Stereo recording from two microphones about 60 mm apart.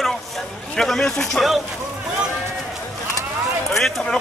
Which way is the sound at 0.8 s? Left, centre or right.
Centre.